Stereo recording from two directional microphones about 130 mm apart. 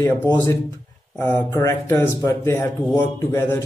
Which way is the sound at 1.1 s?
20° left (ahead or behind).